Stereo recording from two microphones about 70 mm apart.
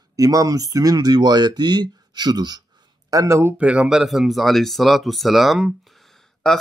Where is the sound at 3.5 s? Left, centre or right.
Centre.